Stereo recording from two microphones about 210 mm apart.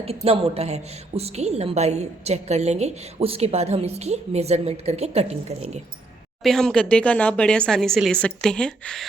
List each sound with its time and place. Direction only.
0.0 s a woman's voice: 30° right (ahead or behind)
6.4 s speech: centre (ahead or behind)